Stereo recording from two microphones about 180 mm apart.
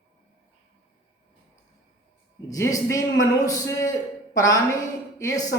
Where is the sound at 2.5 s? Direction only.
20° left (ahead or behind).